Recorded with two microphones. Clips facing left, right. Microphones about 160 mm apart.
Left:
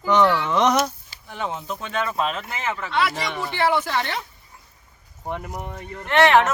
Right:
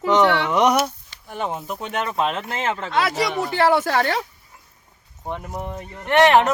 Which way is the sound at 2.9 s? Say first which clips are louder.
Right 2 dB; 40° right (ahead or behind).